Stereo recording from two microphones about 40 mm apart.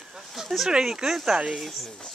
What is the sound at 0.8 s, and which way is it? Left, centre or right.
Speech, centre.